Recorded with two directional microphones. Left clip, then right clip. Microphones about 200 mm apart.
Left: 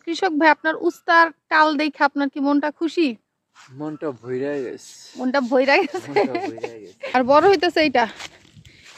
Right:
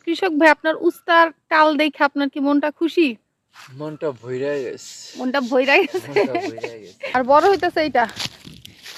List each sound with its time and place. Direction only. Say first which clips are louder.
0.0 s speech: right 2 dB; centre (ahead or behind)
7.1 s speech: even; 35° left (ahead or behind)